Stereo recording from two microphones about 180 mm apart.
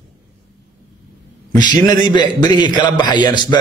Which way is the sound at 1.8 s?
25° left (ahead or behind).